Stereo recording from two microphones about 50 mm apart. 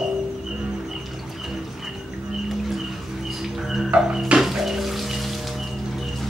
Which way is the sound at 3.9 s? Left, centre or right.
Centre.